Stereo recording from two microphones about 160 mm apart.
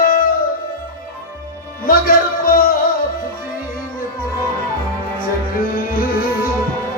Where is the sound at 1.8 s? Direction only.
65° left (ahead or behind).